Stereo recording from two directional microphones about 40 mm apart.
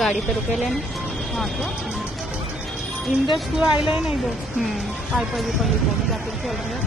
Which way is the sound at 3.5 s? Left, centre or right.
Centre.